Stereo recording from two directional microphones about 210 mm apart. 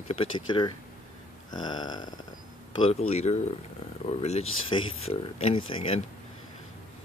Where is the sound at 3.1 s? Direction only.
30° left (ahead or behind).